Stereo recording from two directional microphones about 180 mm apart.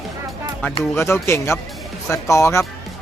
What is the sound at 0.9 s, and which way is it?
Speech, 15° left (ahead or behind).